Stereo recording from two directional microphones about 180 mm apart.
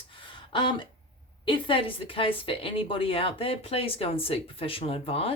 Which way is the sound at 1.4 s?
30° left (ahead or behind).